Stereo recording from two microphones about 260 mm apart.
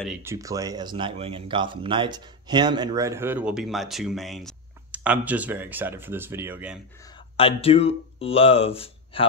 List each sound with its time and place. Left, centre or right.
0.0 s speech: centre
7.3 s speech: left